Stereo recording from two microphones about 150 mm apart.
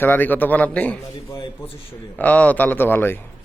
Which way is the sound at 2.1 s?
10° left (ahead or behind).